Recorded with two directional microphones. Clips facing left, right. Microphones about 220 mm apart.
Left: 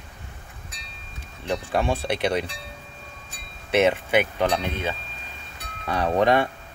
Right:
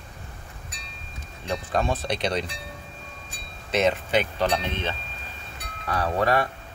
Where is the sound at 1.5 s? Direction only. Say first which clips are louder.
Left 2 dB; 15° left (ahead or behind).